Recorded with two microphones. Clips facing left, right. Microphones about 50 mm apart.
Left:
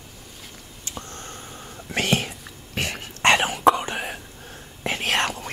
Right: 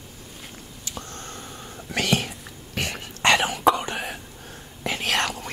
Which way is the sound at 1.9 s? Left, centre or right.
Left.